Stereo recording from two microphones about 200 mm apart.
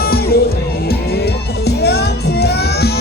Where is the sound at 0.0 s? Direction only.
50° left (ahead or behind).